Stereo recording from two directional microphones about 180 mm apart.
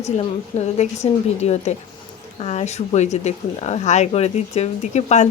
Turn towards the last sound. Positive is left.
turn(degrees=40)  # may be behind; listen again after turning